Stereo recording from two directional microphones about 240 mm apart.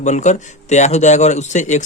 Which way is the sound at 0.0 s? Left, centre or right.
Left.